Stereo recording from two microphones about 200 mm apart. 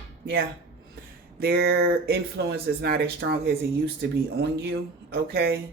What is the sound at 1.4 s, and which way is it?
A woman's voice, 55° right (ahead or behind).